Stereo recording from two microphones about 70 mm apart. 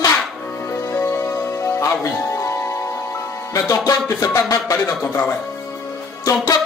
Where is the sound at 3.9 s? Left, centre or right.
Left.